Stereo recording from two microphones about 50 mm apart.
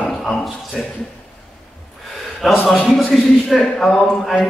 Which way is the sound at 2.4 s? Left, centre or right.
Centre.